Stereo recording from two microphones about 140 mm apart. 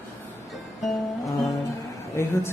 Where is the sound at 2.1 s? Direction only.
20° left (ahead or behind).